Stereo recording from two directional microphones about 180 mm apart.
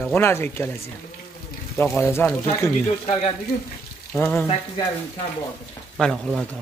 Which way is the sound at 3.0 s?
35° left (ahead or behind).